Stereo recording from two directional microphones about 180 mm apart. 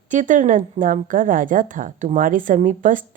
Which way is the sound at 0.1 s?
45° right (ahead or behind).